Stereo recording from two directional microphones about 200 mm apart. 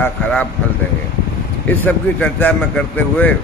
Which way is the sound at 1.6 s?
10° left (ahead or behind).